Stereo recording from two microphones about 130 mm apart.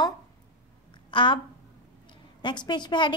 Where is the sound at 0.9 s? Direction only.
40° left (ahead or behind).